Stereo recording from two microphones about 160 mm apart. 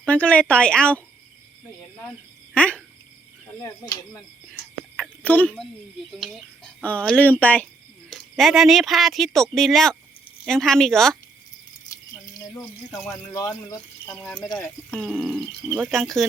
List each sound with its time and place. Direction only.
0.0 s a woman's voice: 10° left (ahead or behind)
2.6 s a sound: 5° left (ahead or behind)
3.6 s a woman's voice: 20° left (ahead or behind)
5.2 s a woman's voice: 10° left (ahead or behind)
11.9 s a sound: 20° left (ahead or behind)
13.1 s speech: 20° left (ahead or behind)
14.2 s speech: 5° left (ahead or behind)